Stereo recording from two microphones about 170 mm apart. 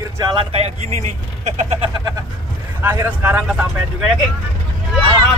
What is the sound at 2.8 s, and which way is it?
Speech, 15° right (ahead or behind).